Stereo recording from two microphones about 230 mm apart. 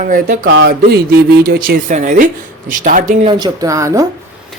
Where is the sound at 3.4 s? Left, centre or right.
Centre.